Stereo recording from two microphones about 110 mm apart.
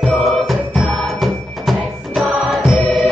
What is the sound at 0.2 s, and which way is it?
Music, centre (ahead or behind).